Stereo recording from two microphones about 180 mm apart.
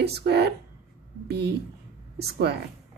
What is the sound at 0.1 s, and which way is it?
Speech, 65° right (ahead or behind).